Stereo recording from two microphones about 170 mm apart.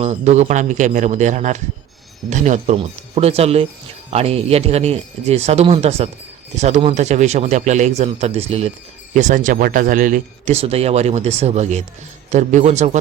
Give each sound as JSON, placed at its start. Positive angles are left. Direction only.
{"t": 0.0, "sound": "a man's voice", "side_deg": -40}